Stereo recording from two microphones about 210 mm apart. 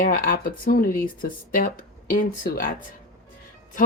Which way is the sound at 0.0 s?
40° left (ahead or behind).